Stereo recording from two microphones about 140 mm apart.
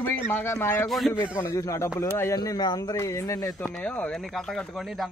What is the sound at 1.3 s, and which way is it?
Speech, 20° left (ahead or behind).